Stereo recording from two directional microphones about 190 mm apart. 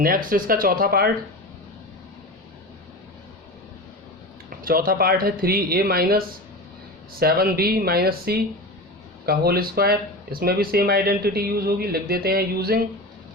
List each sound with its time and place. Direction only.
0.0 s speech: 50° right (ahead or behind)
4.4 s speech: 50° right (ahead or behind)